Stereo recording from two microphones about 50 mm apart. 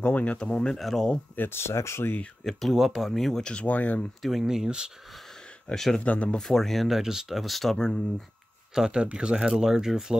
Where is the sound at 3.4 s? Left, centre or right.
Left.